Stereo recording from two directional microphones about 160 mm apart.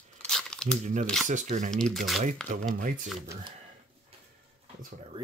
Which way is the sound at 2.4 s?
60° right (ahead or behind).